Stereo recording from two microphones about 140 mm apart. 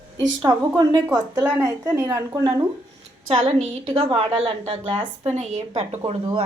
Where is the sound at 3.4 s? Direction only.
50° right (ahead or behind).